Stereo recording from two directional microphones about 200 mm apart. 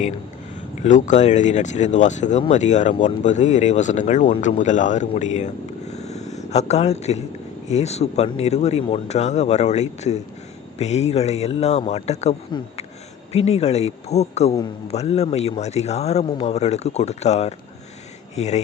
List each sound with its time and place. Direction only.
0.8 s speech: 35° left (ahead or behind)
5.9 s a sound: 35° left (ahead or behind)
7.7 s speech: 35° left (ahead or behind)